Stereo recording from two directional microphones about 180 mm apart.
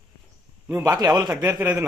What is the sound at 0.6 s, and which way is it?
A man's voice, 15° right (ahead or behind).